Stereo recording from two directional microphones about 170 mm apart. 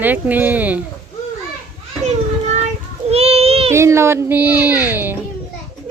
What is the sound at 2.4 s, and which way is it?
Child singing, 40° right (ahead or behind).